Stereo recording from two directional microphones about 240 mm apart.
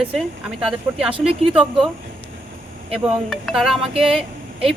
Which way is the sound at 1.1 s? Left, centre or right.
Right.